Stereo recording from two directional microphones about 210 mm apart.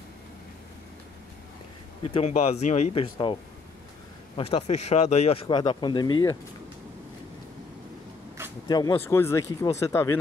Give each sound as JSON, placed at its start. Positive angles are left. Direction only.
{"t": 2.0, "sound": "speech", "side_deg": 30}
{"t": 4.4, "sound": "speech", "side_deg": 30}
{"t": 8.6, "sound": "speech", "side_deg": 20}